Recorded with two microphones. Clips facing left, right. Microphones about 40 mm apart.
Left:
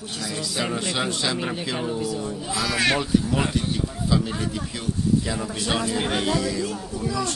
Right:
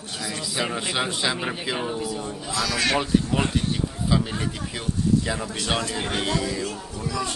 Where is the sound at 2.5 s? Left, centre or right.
Centre.